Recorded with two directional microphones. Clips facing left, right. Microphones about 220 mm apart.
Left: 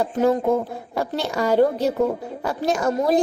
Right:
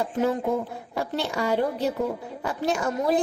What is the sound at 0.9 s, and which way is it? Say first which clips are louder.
A woman's voice: left 3 dB; 40° left (ahead or behind).